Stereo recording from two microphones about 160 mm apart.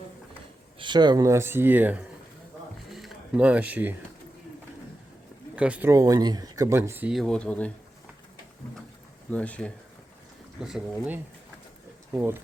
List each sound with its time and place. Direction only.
0.8 s speech: 30° right (ahead or behind); by 2.0 s 10° right (ahead or behind)
2.9 s a sound: centre (ahead or behind)
5.5 s speech: 10° right (ahead or behind)
5.9 s speech: 20° right (ahead or behind)
7.1 s speech: centre (ahead or behind)
9.3 s speech: 10° left (ahead or behind)
10.6 s speech: 5° right (ahead or behind)